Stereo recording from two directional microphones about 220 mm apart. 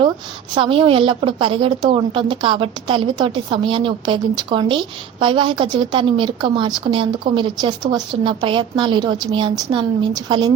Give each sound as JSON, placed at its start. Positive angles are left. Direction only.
{"t": 0.5, "sound": "a woman's voice", "side_deg": -25}